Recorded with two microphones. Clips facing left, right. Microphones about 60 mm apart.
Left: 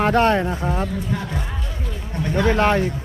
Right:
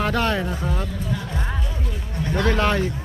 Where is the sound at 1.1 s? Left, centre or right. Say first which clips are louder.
Even; left.